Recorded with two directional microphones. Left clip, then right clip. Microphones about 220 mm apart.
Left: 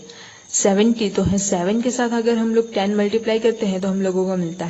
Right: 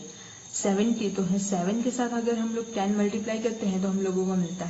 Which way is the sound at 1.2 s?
50° left (ahead or behind).